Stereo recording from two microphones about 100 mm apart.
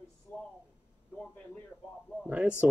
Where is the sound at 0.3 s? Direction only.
20° left (ahead or behind).